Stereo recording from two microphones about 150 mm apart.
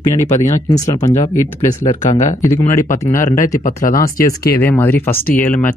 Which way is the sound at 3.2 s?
60° left (ahead or behind).